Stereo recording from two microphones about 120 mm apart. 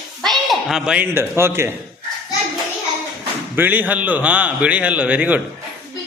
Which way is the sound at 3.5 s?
15° right (ahead or behind).